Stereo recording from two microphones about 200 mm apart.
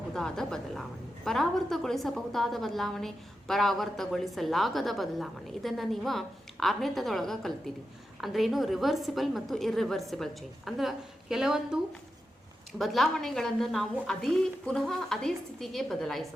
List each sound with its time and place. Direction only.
0.1 s a woman's voice: 5° left (ahead or behind)
12.8 s a woman's voice: centre (ahead or behind)